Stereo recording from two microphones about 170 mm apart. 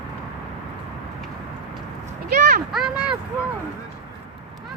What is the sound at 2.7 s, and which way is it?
Speech, 5° right (ahead or behind).